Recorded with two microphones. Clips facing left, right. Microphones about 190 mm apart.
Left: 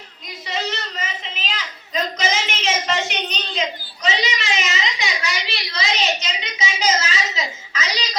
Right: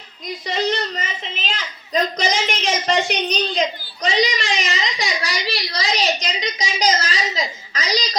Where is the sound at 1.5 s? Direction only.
45° right (ahead or behind).